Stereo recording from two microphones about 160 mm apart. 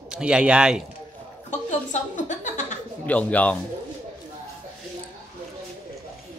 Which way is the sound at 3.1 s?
10° left (ahead or behind).